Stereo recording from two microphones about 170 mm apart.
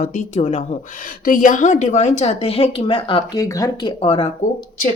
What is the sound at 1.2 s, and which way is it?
A woman's voice, 55° left (ahead or behind).